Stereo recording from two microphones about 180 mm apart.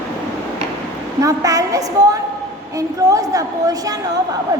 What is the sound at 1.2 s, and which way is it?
A woman's voice, 20° right (ahead or behind).